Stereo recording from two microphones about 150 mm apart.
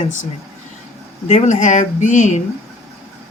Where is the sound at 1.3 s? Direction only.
55° left (ahead or behind).